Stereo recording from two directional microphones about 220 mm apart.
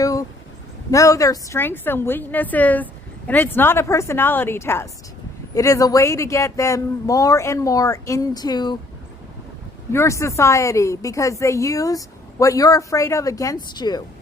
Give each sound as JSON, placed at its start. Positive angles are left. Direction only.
{"t": 0.0, "sound": "a sound", "side_deg": 15}
{"t": 0.9, "sound": "a woman's voice", "side_deg": 15}
{"t": 9.9, "sound": "a woman's voice", "side_deg": 15}